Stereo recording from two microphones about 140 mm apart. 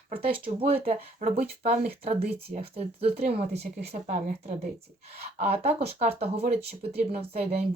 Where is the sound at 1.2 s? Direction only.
60° right (ahead or behind).